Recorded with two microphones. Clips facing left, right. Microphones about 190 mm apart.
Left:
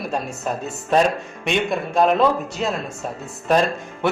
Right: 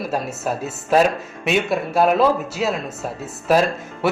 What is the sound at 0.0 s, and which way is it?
Speech, 5° right (ahead or behind).